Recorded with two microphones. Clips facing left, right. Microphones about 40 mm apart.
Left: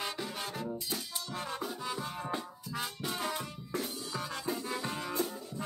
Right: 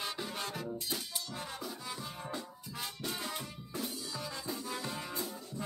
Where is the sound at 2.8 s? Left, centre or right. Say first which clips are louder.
Left 2 dB; centre.